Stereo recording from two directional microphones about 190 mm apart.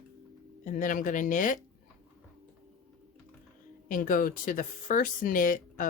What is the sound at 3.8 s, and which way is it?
Speech, 45° left (ahead or behind).